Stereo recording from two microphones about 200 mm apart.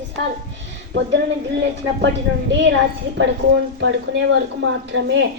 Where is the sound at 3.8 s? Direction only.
70° right (ahead or behind).